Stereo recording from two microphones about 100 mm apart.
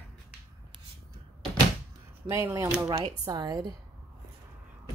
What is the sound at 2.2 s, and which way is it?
Speech, 30° right (ahead or behind).